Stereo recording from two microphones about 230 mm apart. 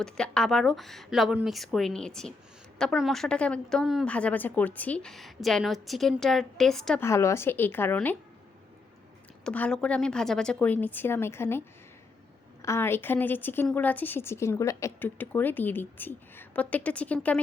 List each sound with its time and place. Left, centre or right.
0.0 s a woman's voice: centre
9.4 s a woman's voice: centre
12.6 s speech: centre